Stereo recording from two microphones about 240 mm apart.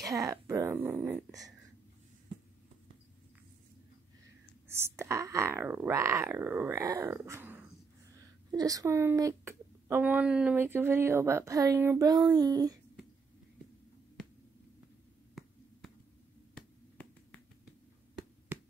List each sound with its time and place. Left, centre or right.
0.0 s speech: centre
4.6 s speech: centre
16.5 s finger snapping: centre
18.5 s a sound: centre